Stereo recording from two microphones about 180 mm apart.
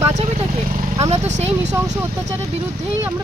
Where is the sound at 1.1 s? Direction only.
40° right (ahead or behind).